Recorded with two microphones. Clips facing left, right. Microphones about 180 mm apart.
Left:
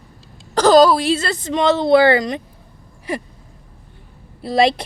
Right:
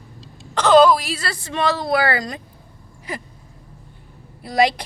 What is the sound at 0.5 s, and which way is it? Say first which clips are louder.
A woman's voice: left 2 dB; 40° left (ahead or behind).